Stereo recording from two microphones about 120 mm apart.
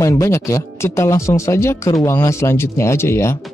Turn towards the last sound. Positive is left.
turn(degrees=20)  # may be behind; listen again after turning